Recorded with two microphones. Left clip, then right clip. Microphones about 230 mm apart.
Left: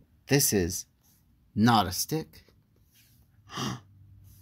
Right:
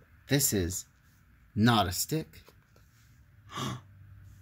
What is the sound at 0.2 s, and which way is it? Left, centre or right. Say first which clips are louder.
Speech: left 4 dB; left.